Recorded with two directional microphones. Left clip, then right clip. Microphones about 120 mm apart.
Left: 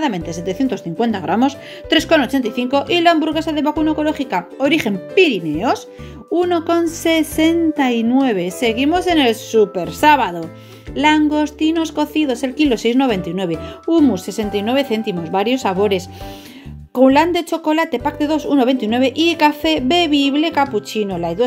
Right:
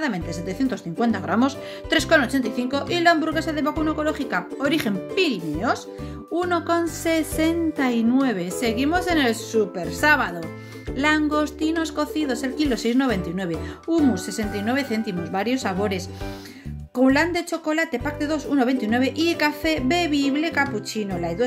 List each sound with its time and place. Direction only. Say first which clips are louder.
0.0 s a woman's voice: left 6 dB; 15° left (ahead or behind)